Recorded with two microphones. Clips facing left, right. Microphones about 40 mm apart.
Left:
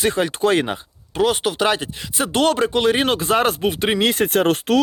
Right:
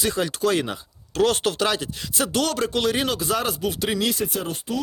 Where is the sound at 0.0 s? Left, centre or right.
Left.